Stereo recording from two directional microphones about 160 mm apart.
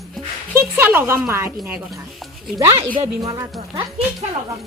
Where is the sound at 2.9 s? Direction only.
20° right (ahead or behind).